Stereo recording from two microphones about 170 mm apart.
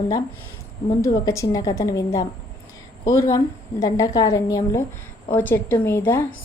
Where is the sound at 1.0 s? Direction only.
20° left (ahead or behind).